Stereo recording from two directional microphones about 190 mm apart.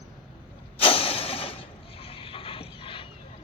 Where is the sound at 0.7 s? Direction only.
30° left (ahead or behind).